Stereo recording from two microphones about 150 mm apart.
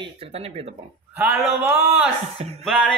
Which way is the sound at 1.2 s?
10° right (ahead or behind).